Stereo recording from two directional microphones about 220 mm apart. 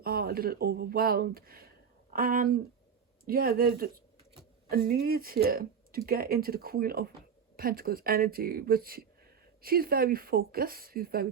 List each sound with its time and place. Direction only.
0.0 s speech: 45° right (ahead or behind)